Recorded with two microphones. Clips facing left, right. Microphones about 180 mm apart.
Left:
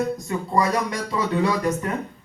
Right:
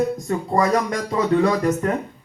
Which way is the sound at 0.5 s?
45° right (ahead or behind).